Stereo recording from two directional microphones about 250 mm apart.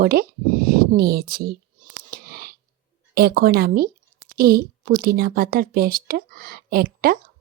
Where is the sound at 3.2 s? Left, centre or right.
Right.